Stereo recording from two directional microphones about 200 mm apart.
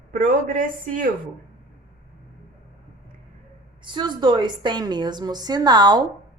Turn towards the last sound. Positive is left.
turn(degrees=-20)  # may be behind; listen again after turning